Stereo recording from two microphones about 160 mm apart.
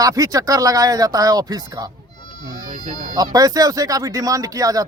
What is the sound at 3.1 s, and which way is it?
Speech, 25° right (ahead or behind).